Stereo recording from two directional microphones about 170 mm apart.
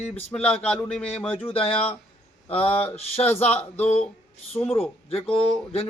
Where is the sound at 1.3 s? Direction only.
35° left (ahead or behind).